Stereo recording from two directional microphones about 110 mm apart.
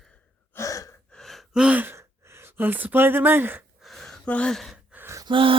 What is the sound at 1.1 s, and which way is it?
Gasp, centre (ahead or behind).